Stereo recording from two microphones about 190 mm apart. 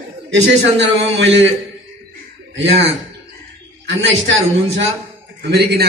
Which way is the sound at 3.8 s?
80° right.